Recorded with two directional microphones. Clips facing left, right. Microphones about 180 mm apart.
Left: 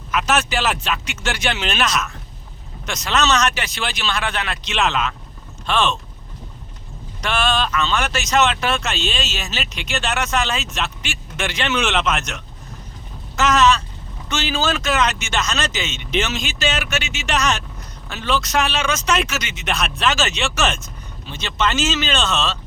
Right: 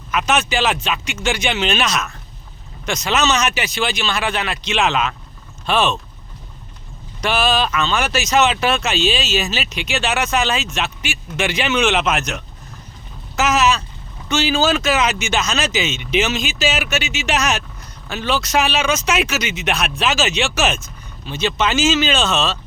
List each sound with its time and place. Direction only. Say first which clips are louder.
0.1 s speech: right 1 dB; centre (ahead or behind)
7.2 s speech: right 3 dB; 5° right (ahead or behind)